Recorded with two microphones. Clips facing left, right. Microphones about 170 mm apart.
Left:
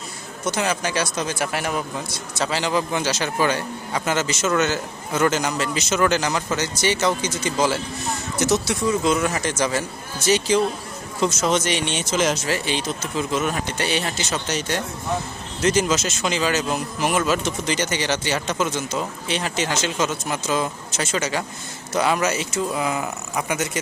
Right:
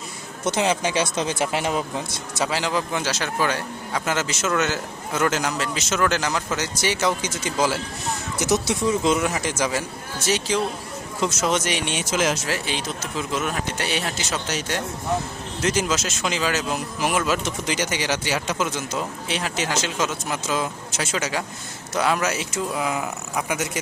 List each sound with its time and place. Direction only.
0.4 s speech: 25° right (ahead or behind)
2.4 s speech: 5° right (ahead or behind); by 9.2 s 20° right (ahead or behind)
9.2 s speech: 10° right (ahead or behind)